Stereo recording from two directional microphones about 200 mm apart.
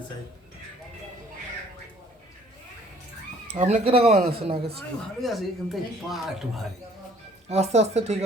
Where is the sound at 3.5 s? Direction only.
35° right (ahead or behind).